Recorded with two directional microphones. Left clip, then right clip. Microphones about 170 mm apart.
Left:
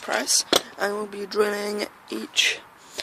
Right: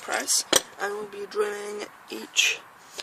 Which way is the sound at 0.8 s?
50° left (ahead or behind).